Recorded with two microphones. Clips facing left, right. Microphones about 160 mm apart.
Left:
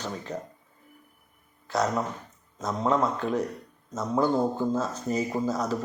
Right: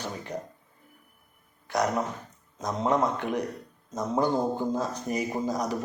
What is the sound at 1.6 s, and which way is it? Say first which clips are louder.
Speech: even; 15° right (ahead or behind).